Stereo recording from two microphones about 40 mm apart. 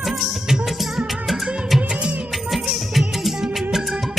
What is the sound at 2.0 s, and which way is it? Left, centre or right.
Music, right.